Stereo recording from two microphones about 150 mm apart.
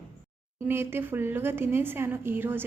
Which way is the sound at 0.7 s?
15° right (ahead or behind).